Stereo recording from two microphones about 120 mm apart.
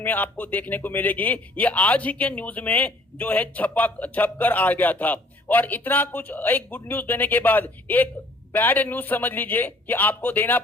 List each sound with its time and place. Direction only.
0.0 s a man's voice: 15° left (ahead or behind)